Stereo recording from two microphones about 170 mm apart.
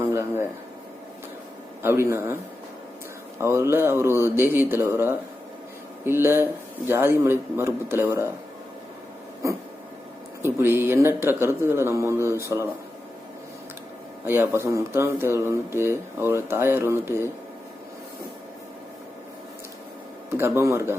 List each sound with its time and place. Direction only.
0.0 s a sound: 15° right (ahead or behind)
1.8 s speech: 15° right (ahead or behind)
3.4 s speech: 15° right (ahead or behind)
9.4 s throat clearing: 20° right (ahead or behind)
10.4 s speech: 15° right (ahead or behind)
14.3 s speech: 15° right (ahead or behind)
20.3 s speech: 15° right (ahead or behind)